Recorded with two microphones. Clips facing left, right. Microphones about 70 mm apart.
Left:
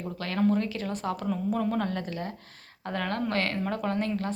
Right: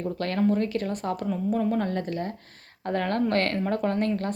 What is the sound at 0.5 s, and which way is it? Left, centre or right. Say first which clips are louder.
Speech: right 3 dB; right.